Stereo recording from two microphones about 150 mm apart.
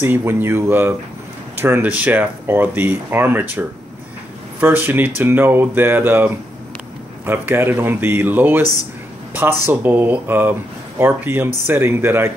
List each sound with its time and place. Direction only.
0.0 s speech: 15° right (ahead or behind)